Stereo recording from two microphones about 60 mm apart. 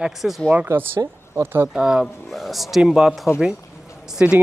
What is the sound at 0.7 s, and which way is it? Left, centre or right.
Speech, right.